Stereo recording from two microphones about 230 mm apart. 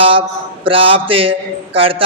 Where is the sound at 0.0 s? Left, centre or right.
Right.